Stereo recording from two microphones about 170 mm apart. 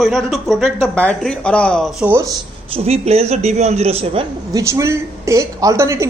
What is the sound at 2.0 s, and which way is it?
Speech, 15° right (ahead or behind).